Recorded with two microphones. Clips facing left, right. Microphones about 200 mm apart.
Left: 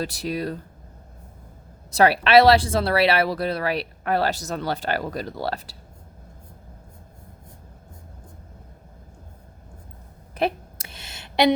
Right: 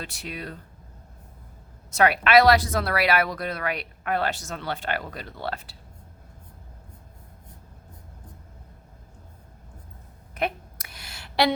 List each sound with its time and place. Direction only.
0.0 s speech: 35° left (ahead or behind)
1.9 s speech: 35° left (ahead or behind)
10.3 s a sound: 30° left (ahead or behind)